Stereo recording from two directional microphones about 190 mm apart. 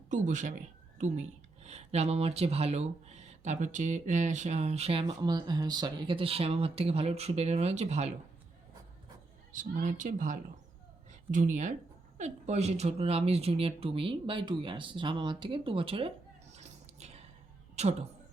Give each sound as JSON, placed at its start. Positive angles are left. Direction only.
{"t": 0.1, "sound": "speech", "side_deg": -40}
{"t": 9.5, "sound": "speech", "side_deg": -45}
{"t": 16.6, "sound": "a sound", "side_deg": -35}
{"t": 17.8, "sound": "speech", "side_deg": -35}